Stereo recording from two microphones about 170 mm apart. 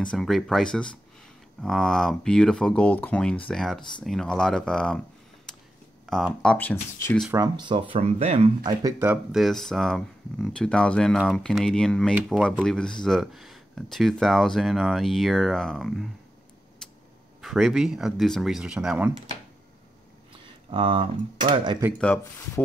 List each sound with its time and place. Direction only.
0.0 s speech: 5° left (ahead or behind)
6.1 s speech: centre (ahead or behind)
7.3 s speech: 25° right (ahead or behind)
7.9 s speech: 35° right (ahead or behind)
9.0 s speech: 10° right (ahead or behind)
9.4 s speech: centre (ahead or behind)
17.4 s speech: centre (ahead or behind)
20.4 s a sound: 30° right (ahead or behind)
21.9 s speech: 5° left (ahead or behind)